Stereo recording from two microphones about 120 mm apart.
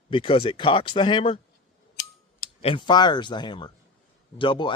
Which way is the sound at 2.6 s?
50° left (ahead or behind).